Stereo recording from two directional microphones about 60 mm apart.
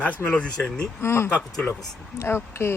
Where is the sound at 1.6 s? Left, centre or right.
Left.